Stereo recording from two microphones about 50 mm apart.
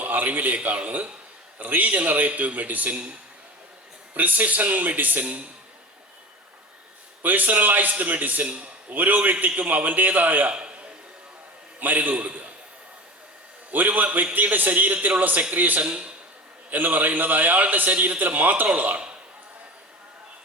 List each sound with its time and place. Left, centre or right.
0.0 s a man's voice: right
4.1 s a man's voice: right
7.2 s a man's voice: right
9.0 s a man's voice: right
10.5 s a sound: right
11.8 s a man's voice: right
13.7 s a man's voice: right
15.8 s speech: centre
16.6 s a man's voice: right